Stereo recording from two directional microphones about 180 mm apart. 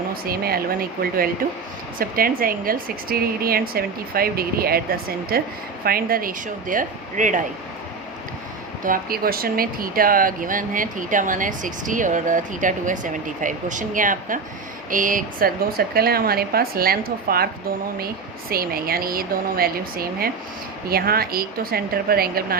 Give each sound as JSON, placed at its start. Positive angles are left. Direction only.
{"t": 0.1, "sound": "speech", "side_deg": -55}
{"t": 8.8, "sound": "speech", "side_deg": -50}